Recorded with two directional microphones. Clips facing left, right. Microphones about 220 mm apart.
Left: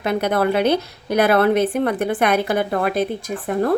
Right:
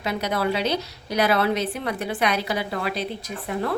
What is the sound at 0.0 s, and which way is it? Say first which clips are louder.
A woman's voice: left 6 dB; 55° left (ahead or behind).